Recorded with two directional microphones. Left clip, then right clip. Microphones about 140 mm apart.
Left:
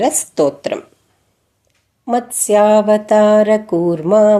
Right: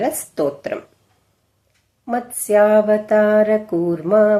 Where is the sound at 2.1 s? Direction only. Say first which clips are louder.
Left 4 dB; 30° left (ahead or behind).